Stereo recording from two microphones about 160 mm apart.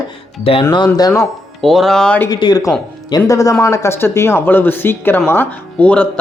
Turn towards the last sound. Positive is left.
turn(degrees=10)  # may be behind; listen again after turning